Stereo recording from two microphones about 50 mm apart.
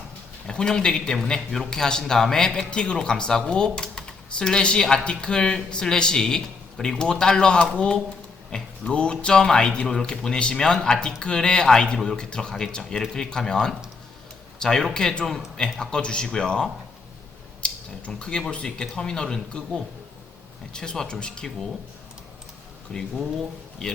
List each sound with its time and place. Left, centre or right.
0.4 s speech: centre
22.9 s speech: left